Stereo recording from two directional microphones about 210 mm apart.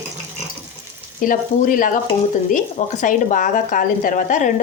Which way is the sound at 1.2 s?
40° left (ahead or behind).